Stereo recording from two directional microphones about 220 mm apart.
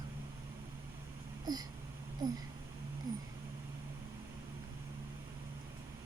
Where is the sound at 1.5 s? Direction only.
15° right (ahead or behind).